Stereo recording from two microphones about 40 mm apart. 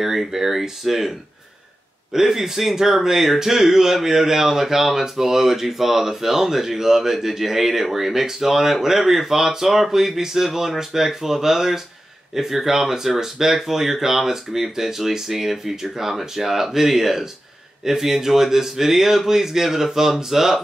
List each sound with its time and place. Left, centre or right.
0.0 s speech: centre
2.1 s speech: centre